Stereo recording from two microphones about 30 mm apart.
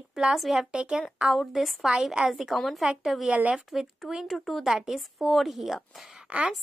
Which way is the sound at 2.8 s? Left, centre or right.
Centre.